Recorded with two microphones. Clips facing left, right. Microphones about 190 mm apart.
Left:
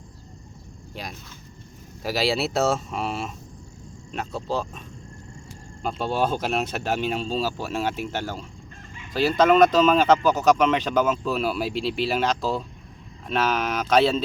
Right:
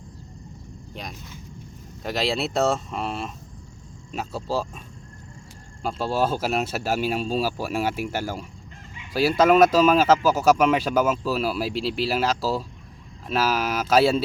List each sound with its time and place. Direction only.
2.0 s speech: 5° left (ahead or behind)
5.8 s speech: centre (ahead or behind)